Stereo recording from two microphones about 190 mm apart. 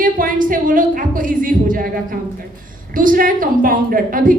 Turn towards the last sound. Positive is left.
turn(degrees=-45)  # may be behind; listen again after turning